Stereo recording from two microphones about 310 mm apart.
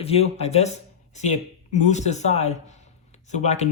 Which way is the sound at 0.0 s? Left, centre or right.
Centre.